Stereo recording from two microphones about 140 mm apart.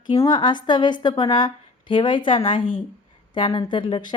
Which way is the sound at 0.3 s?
35° left (ahead or behind).